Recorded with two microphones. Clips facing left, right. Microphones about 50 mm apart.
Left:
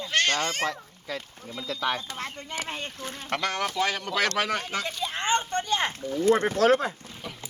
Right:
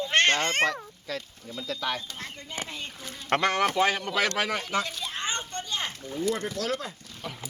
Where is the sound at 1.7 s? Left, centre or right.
Left.